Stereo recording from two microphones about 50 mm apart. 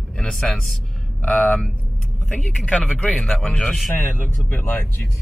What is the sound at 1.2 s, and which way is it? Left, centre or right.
Speech, left.